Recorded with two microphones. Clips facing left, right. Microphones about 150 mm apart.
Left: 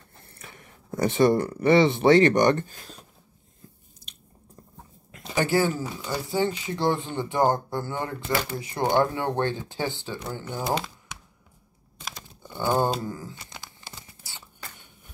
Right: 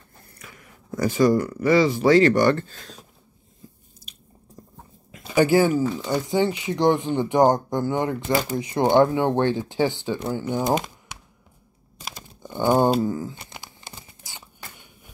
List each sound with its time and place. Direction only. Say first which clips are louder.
0.2 s speech: right 1 dB; 30° left (ahead or behind); by 3.0 s 10° left (ahead or behind)
5.3 s speech: right 6 dB; 15° right (ahead or behind)
12.5 s tearing: right 6 dB; 15° right (ahead or behind)